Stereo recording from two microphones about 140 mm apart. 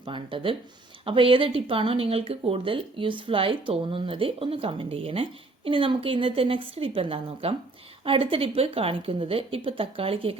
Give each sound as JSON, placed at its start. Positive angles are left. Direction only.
{"t": 0.0, "sound": "speech", "side_deg": -35}